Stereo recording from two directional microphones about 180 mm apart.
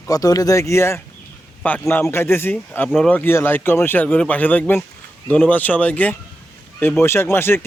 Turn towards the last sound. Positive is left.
turn(degrees=15)  # may be behind; listen again after turning